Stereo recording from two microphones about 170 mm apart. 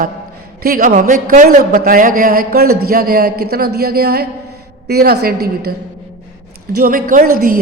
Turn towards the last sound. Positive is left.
turn(degrees=-55)  # may be behind; listen again after turning